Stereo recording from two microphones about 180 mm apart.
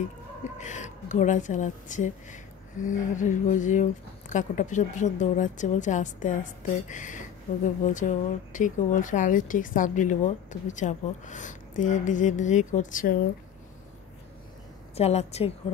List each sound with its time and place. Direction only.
0.6 s a woman's voice: 40° left (ahead or behind)
15.0 s a woman's voice: 35° left (ahead or behind)